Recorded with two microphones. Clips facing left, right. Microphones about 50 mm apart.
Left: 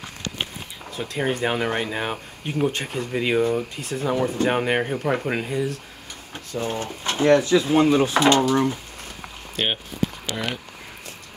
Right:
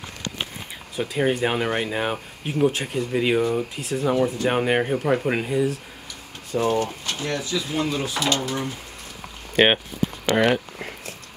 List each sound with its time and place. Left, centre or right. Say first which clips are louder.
0.9 s speech: right 3 dB; centre
6.5 s speech: right 6 dB; right
6.8 s speech: left 4 dB; left
10.2 s speech: right 9 dB; right